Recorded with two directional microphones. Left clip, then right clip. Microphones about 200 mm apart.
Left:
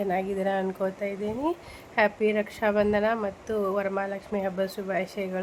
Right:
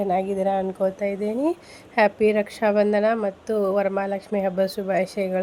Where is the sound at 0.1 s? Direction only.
15° right (ahead or behind).